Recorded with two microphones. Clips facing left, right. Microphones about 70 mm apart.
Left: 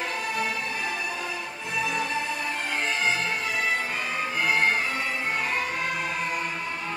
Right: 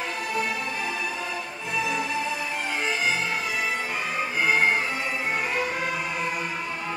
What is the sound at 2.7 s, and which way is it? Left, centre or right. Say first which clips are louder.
Music: even; centre.